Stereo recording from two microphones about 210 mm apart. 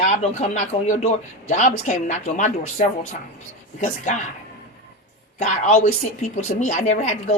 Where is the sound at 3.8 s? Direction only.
35° left (ahead or behind).